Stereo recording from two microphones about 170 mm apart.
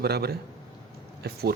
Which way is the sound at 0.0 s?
70° right (ahead or behind).